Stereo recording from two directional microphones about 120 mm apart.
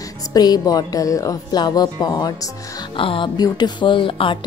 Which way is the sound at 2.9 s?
45° left (ahead or behind).